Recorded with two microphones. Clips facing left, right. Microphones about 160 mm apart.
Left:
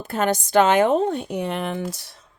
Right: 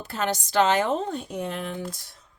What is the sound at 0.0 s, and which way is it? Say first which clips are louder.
A woman's voice: left 6 dB; 50° left (ahead or behind).